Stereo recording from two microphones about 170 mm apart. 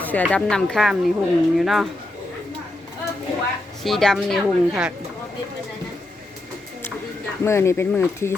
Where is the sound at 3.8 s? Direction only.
Centre (ahead or behind).